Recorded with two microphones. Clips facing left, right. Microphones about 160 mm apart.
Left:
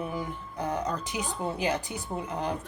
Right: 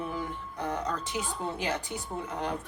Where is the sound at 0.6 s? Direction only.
20° left (ahead or behind).